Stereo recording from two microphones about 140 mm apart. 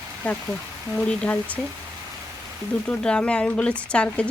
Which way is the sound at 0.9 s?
10° left (ahead or behind).